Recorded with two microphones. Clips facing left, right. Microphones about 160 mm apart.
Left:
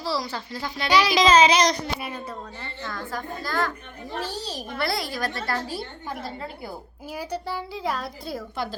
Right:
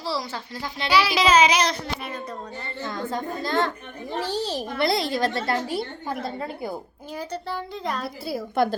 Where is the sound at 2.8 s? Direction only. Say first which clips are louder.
Right 4 dB; 20° right (ahead or behind).